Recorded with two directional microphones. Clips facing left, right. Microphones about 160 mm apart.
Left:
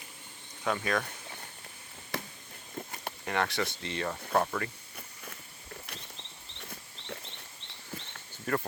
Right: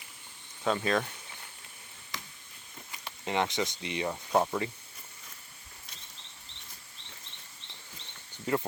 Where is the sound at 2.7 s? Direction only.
50° left (ahead or behind).